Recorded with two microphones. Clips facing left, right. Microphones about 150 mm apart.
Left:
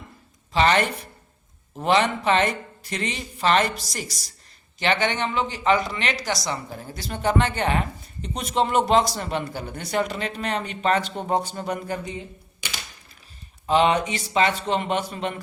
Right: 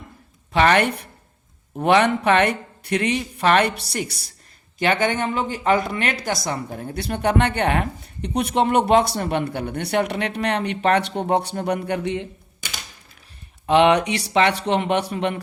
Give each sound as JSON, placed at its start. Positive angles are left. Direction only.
{"t": 0.5, "sound": "speech", "side_deg": -60}
{"t": 4.8, "sound": "speech", "side_deg": -50}
{"t": 13.7, "sound": "speech", "side_deg": -70}